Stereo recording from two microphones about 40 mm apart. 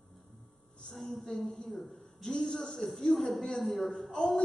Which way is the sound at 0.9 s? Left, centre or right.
Centre.